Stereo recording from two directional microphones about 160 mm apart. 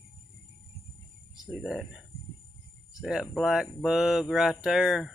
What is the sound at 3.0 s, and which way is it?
Speech, centre (ahead or behind).